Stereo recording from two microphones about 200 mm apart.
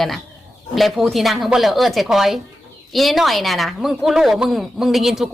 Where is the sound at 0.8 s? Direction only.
Centre (ahead or behind).